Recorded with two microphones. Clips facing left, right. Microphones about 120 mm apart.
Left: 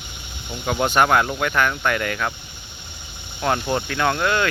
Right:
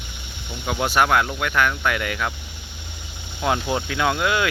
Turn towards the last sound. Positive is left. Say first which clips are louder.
# left 1 dB
turn(degrees=-5)  # may be behind; listen again after turning